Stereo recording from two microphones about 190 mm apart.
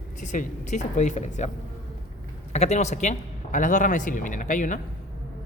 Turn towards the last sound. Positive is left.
turn(degrees=40)  # may be behind; listen again after turning